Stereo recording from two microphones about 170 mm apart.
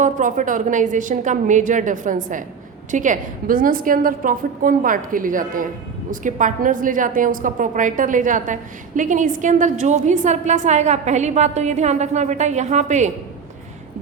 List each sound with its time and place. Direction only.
0.0 s a woman's voice: 50° right (ahead or behind)